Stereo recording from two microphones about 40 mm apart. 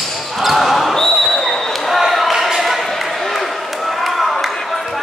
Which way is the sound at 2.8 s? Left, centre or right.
Centre.